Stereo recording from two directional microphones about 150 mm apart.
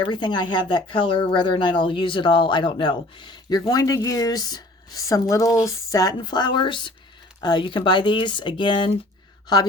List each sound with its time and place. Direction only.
0.0 s speech: 30° left (ahead or behind)